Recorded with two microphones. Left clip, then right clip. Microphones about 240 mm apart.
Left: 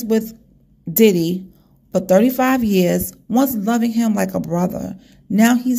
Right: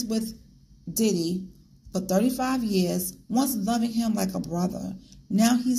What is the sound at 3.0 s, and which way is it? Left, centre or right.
Speech, left.